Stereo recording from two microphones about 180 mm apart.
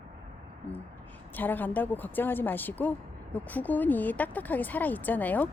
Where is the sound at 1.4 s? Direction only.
10° left (ahead or behind).